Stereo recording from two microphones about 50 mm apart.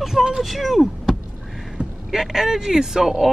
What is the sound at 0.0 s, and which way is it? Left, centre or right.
Vehicle, centre.